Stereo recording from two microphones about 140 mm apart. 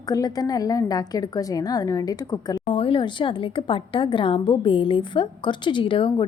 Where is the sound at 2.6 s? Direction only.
40° left (ahead or behind).